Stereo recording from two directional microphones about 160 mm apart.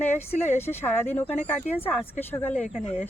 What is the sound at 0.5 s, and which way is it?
Speech, 15° left (ahead or behind).